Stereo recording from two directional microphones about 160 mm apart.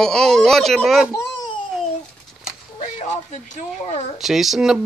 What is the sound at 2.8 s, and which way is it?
Speech, 50° left (ahead or behind).